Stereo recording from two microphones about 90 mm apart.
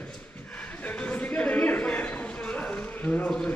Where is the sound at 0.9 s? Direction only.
15° left (ahead or behind).